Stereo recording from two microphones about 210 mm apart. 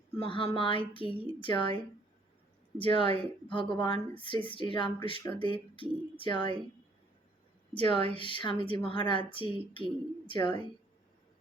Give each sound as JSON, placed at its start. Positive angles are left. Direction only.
{"t": 0.2, "sound": "speech", "side_deg": 25}
{"t": 7.7, "sound": "speech", "side_deg": 25}